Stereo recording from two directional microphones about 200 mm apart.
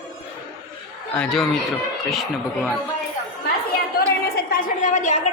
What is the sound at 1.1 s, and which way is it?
Speech, centre (ahead or behind).